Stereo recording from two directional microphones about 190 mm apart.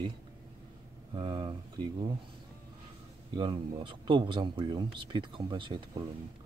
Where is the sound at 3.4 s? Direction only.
25° right (ahead or behind).